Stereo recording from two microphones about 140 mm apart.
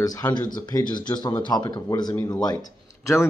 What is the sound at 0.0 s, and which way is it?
Speech, 25° left (ahead or behind).